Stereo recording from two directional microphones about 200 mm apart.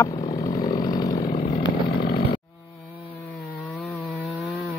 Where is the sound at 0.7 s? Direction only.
20° left (ahead or behind).